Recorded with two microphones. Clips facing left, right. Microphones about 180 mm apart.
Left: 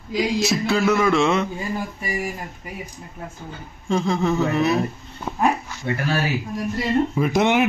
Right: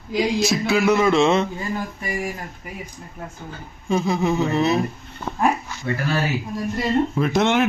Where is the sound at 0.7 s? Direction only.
20° right (ahead or behind).